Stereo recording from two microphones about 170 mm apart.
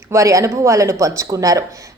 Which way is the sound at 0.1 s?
20° right (ahead or behind).